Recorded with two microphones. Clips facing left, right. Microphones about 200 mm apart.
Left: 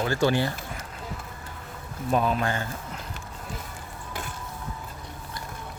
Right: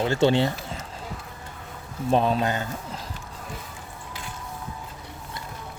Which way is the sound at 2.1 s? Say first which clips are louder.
Right 3 dB; 30° right (ahead or behind).